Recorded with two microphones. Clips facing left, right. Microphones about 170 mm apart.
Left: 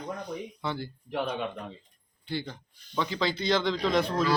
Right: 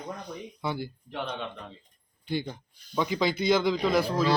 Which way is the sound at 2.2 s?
15° right (ahead or behind).